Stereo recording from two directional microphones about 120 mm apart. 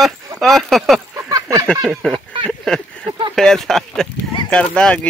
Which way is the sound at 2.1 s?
50° right (ahead or behind).